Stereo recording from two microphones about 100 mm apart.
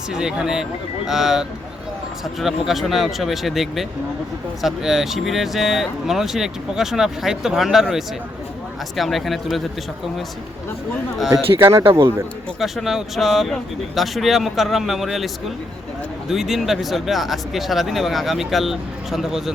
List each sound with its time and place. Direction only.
0.1 s speech: 5° right (ahead or behind)
11.8 s speech: 55° right (ahead or behind)
12.5 s speech: centre (ahead or behind)